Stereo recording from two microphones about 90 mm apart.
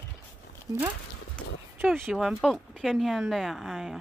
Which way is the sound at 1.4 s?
15° left (ahead or behind).